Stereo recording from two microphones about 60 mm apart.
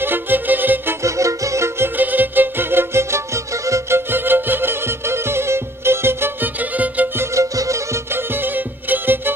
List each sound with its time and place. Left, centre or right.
0.0 s music: right
1.0 s music: right
2.0 s music: right
4.1 s music: right
6.6 s music: right
7.3 s music: right
8.1 s music: right